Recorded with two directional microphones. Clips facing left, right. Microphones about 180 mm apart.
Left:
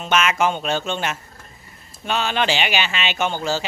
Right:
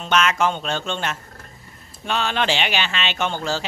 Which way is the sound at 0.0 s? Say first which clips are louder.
Even; 10° left (ahead or behind).